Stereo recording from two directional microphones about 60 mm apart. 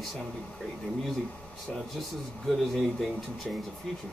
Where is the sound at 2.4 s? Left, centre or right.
Centre.